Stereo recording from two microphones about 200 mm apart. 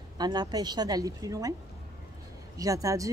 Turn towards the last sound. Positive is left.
turn(degrees=-15)  # may be behind; listen again after turning